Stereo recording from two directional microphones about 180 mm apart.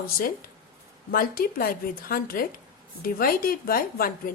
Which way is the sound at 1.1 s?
55° left (ahead or behind).